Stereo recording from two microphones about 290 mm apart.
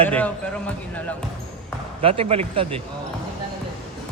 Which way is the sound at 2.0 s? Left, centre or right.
Centre.